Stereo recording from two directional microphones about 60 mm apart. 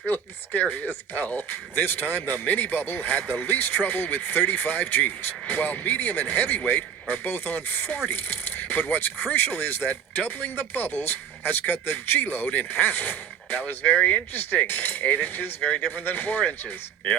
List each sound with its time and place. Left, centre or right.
0.0 s speech: left
13.8 s speech: left
16.4 s speech: left